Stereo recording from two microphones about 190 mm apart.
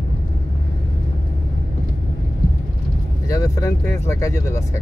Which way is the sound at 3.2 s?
15° left (ahead or behind).